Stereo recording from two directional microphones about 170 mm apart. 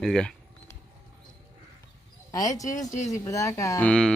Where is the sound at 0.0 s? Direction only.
5° left (ahead or behind).